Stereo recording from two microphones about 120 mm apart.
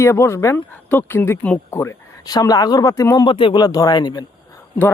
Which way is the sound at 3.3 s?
45° left (ahead or behind).